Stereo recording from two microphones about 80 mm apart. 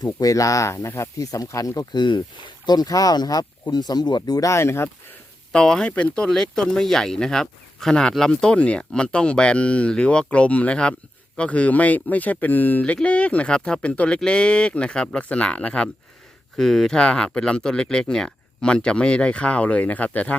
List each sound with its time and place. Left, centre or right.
0.0 s speech: left
1.2 s speech: left
1.9 s speech: left
2.6 s speech: left
4.4 s speech: left
5.5 s speech: centre
16.6 s speech: centre